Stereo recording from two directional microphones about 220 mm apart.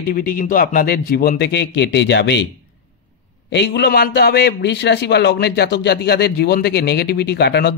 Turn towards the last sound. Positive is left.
turn(degrees=50)  # may be behind; listen again after turning